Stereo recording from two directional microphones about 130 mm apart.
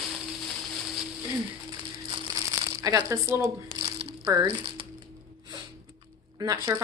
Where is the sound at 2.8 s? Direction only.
25° right (ahead or behind).